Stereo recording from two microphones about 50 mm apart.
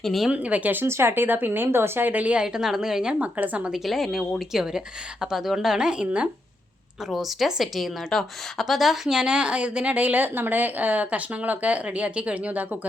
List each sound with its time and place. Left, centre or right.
0.0 s a woman's voice: centre
0.3 s a woman's voice: right
0.9 s speech: right
2.2 s a woman's voice: right
2.5 s a woman's voice: centre
3.2 s a woman's voice: right
3.7 s a woman's voice: centre
7.1 s a woman's voice: centre; by 12.6 s right